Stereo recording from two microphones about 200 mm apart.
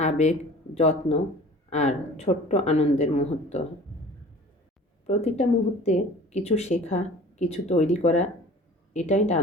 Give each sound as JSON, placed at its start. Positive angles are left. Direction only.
{"t": 0.0, "sound": "speech", "side_deg": 35}
{"t": 5.0, "sound": "speech", "side_deg": 35}